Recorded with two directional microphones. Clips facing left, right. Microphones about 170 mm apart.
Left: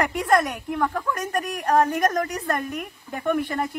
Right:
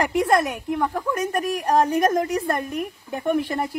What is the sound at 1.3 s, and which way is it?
A woman's voice, 10° right (ahead or behind).